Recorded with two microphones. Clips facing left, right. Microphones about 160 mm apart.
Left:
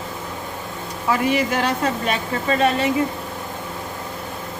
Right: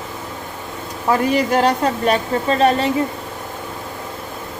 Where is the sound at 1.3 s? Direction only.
40° right (ahead or behind).